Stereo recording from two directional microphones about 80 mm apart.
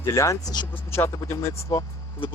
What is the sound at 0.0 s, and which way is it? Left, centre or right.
Speech, left.